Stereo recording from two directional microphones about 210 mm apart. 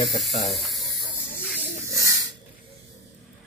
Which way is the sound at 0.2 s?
Centre (ahead or behind).